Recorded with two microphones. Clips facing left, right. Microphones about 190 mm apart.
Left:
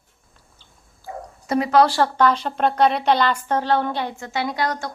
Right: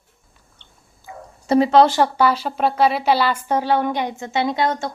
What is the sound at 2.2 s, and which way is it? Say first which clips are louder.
A woman's voice: right 1 dB; 5° right (ahead or behind).